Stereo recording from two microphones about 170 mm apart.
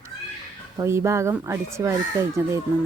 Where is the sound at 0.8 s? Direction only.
15° right (ahead or behind).